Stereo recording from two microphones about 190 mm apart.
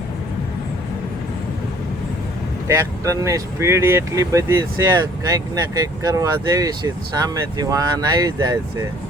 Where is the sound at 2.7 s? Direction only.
15° right (ahead or behind).